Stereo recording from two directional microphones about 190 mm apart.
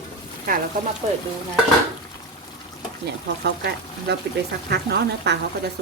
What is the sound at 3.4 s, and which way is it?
Speech, 60° right (ahead or behind).